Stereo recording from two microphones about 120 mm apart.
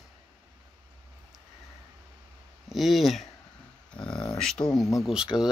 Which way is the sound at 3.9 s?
10° left (ahead or behind).